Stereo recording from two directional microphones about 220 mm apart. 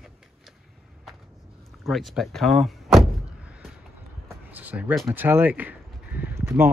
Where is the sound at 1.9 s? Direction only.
Centre (ahead or behind).